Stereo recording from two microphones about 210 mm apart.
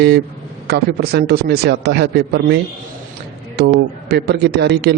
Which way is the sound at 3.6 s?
50° right (ahead or behind).